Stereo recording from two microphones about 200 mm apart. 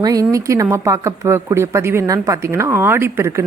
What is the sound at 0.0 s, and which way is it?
A man's voice, 15° right (ahead or behind).